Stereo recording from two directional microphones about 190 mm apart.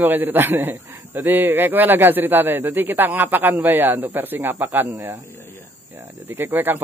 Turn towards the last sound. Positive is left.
turn(degrees=-10)  # may be behind; listen again after turning